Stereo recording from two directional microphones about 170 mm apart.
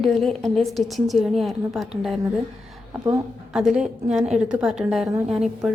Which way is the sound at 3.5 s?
5° right (ahead or behind).